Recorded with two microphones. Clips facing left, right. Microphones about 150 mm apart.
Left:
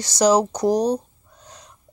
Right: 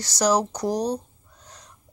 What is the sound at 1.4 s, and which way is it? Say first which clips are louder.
Wheeze: left 3 dB; 20° left (ahead or behind).